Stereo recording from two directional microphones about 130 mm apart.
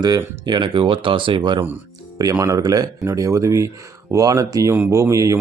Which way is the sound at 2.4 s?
25° right (ahead or behind).